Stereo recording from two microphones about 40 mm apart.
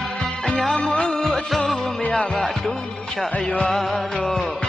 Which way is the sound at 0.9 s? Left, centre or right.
Left.